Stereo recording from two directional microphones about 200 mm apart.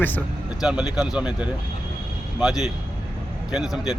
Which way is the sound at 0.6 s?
5° right (ahead or behind).